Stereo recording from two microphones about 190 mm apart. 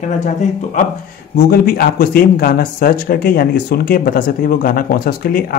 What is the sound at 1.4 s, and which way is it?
Speech, 55° left (ahead or behind).